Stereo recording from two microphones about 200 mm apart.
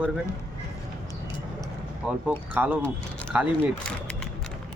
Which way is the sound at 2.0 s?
5° right (ahead or behind).